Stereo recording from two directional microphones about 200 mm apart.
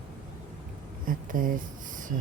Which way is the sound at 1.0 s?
45° right (ahead or behind).